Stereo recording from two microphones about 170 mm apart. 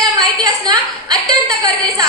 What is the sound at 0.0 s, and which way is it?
A woman's voice, 25° right (ahead or behind).